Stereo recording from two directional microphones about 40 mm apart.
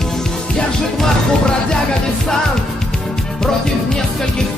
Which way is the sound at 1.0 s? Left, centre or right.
Centre.